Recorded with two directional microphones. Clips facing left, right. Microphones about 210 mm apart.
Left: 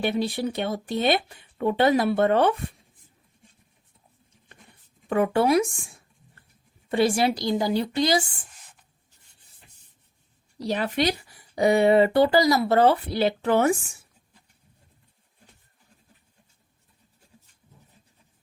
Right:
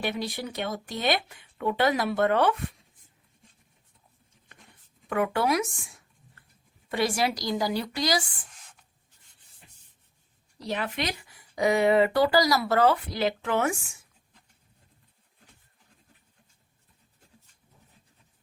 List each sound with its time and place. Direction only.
0.0 s speech: 30° left (ahead or behind)
5.0 s speech: 30° left (ahead or behind)
6.8 s speech: 30° left (ahead or behind)
10.7 s speech: 35° left (ahead or behind)